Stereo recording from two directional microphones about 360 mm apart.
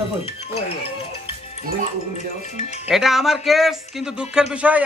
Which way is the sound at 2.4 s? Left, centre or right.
Centre.